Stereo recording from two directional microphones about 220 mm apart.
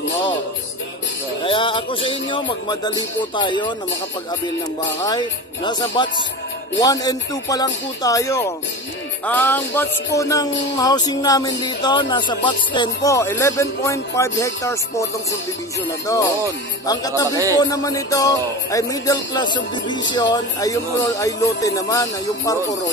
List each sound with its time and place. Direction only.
1.4 s music: 25° left (ahead or behind)
2.0 s speech: 20° left (ahead or behind)
5.0 s speech: 20° left (ahead or behind)
16.8 s speech: 15° left (ahead or behind)